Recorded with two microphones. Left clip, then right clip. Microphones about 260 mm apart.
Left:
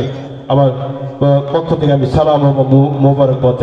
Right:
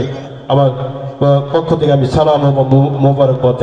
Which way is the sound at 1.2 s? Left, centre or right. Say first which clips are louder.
Right 1 dB; right.